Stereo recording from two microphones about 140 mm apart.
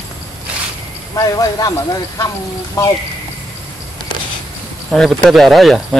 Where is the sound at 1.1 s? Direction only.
25° left (ahead or behind).